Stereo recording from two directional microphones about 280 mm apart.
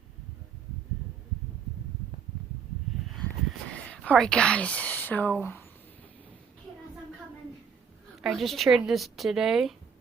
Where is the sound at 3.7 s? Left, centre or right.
Centre.